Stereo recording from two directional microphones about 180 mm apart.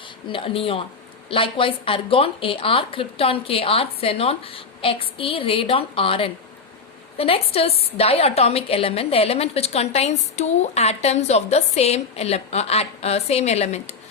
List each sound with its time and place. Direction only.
0.3 s a woman's voice: 30° left (ahead or behind)